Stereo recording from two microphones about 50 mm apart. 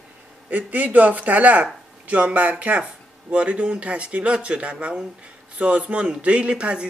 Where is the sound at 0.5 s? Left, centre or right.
Right.